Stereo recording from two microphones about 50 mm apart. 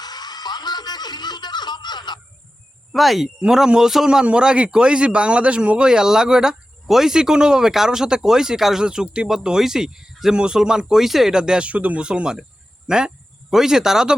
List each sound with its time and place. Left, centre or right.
2.9 s speech: centre
11.6 s speech: right; by 14.2 s centre